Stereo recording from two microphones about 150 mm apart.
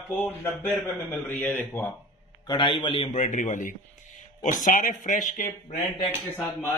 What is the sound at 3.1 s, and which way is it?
Speech, 55° left (ahead or behind).